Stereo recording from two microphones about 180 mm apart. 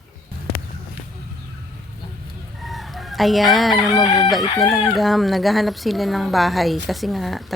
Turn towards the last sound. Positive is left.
turn(degrees=0)  # may be behind; listen again after turning